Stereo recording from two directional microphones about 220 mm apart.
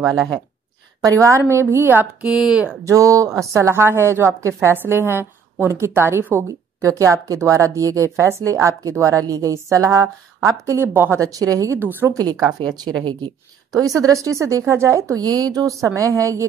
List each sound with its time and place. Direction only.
0.0 s speech: centre (ahead or behind)
1.0 s a woman's voice: 15° right (ahead or behind)